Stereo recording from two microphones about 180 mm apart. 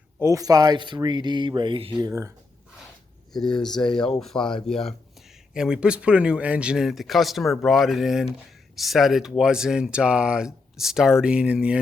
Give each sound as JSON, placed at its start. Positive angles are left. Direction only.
{"t": 0.2, "sound": "speech", "side_deg": -15}
{"t": 2.0, "sound": "speech", "side_deg": -15}
{"t": 3.3, "sound": "speech", "side_deg": 5}